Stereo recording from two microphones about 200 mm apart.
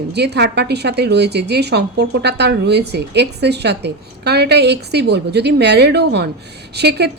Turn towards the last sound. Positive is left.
turn(degrees=-55)  # may be behind; listen again after turning